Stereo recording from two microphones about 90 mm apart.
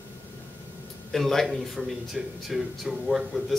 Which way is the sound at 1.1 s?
5° left (ahead or behind).